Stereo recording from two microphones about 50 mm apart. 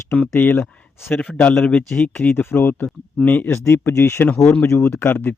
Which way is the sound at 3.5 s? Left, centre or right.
Left.